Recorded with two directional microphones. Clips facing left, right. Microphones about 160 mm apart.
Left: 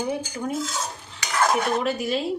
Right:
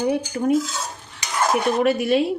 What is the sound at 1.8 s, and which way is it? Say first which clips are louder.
Speech: right 7 dB; 65° right (ahead or behind).